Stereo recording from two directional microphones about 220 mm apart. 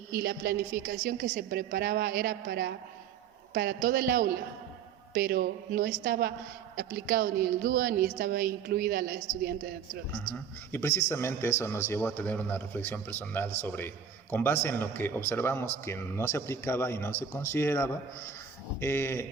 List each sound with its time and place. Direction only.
0.1 s a woman's voice: 45° right (ahead or behind)
10.7 s a man's voice: 10° left (ahead or behind)